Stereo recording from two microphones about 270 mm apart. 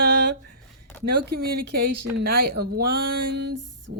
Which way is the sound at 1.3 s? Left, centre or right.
Right.